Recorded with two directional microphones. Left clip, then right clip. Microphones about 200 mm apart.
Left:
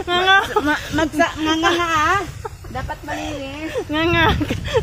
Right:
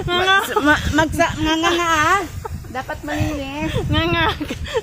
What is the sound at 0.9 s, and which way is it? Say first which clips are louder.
Speech: right 1 dB; 60° right (ahead or behind).